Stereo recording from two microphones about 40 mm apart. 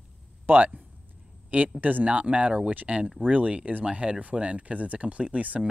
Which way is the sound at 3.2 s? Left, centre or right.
Right.